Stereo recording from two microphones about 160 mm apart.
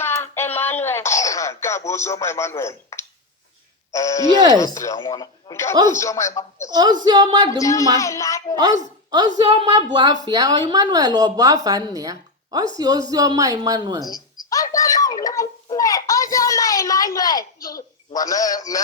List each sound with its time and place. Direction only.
0.0 s a sound: 15° left (ahead or behind)
3.9 s speech: 20° left (ahead or behind)
7.0 s speech: 25° right (ahead or behind)
7.5 s speech: 20° left (ahead or behind)
8.5 s a woman's voice: 25° right (ahead or behind)
14.5 s a sound: 20° left (ahead or behind)
18.1 s speech: 20° left (ahead or behind)